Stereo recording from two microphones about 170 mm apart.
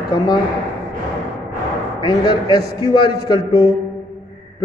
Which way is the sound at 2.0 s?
25° left (ahead or behind).